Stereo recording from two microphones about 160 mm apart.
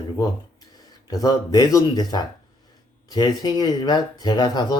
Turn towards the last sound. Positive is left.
turn(degrees=25)  # may be behind; listen again after turning